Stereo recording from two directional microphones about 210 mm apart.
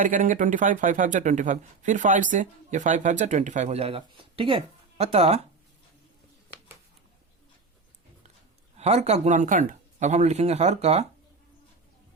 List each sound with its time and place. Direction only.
0.0 s speech: 40° right (ahead or behind)
8.8 s speech: 30° right (ahead or behind)